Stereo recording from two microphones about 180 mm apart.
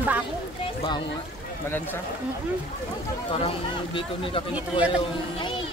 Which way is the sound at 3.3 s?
30° left (ahead or behind).